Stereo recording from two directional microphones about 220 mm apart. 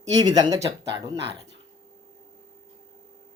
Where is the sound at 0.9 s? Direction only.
50° right (ahead or behind).